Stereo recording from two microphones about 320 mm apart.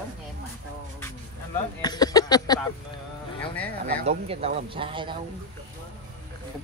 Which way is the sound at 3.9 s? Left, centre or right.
Centre.